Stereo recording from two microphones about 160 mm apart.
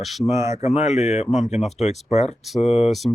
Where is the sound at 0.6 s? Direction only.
45° left (ahead or behind).